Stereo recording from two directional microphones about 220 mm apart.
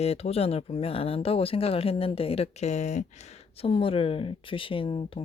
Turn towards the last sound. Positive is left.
turn(degrees=25)  # may be behind; listen again after turning